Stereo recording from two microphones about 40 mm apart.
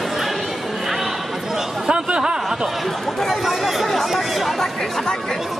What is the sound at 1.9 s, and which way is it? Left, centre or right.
Speech, right.